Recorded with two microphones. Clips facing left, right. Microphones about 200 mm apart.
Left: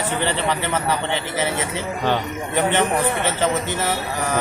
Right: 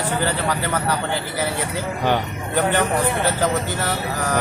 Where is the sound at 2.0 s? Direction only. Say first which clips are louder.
Right 1 dB; 10° right (ahead or behind).